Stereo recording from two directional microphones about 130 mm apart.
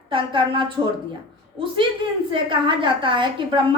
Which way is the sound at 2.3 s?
40° right (ahead or behind).